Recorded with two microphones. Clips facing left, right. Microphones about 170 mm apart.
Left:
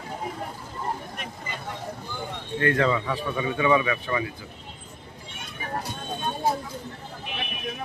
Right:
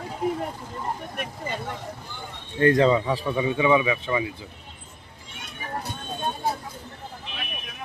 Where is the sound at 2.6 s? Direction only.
30° right (ahead or behind).